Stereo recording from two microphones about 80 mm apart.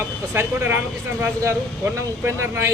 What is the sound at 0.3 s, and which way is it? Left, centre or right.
A man's voice, right.